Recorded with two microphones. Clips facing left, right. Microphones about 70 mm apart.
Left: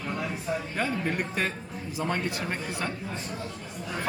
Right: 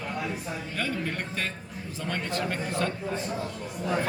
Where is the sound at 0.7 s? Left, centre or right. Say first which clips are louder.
Even; centre.